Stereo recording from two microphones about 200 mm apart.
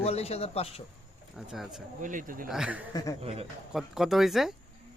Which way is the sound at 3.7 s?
Centre (ahead or behind).